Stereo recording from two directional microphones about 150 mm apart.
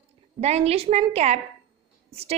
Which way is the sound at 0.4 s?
45° right (ahead or behind).